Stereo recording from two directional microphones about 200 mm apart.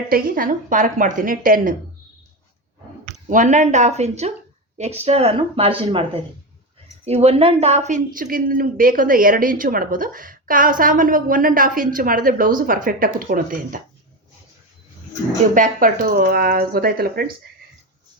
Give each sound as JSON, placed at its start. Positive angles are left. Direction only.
{"t": 0.1, "sound": "a woman's voice", "side_deg": -45}
{"t": 3.2, "sound": "a woman's voice", "side_deg": -40}
{"t": 15.5, "sound": "a woman's voice", "side_deg": -40}